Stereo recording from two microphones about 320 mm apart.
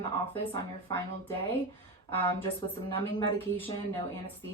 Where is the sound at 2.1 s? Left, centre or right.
Centre.